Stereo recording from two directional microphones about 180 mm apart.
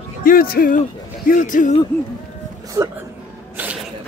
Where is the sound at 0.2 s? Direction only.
55° left (ahead or behind).